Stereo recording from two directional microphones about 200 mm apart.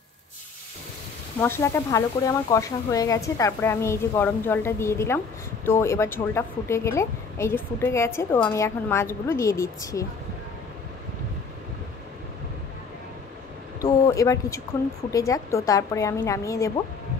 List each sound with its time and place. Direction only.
1.4 s a woman's voice: 10° left (ahead or behind)
13.7 s a woman's voice: 15° left (ahead or behind)